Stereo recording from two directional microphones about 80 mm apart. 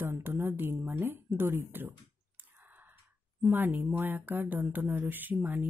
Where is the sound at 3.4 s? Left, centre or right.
Right.